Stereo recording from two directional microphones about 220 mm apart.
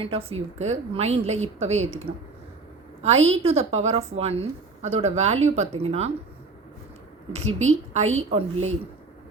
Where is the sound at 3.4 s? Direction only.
25° right (ahead or behind).